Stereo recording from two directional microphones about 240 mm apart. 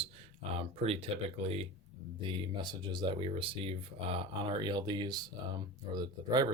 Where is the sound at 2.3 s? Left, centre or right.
Centre.